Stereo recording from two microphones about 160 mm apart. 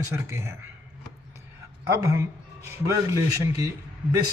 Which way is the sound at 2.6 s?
15° right (ahead or behind).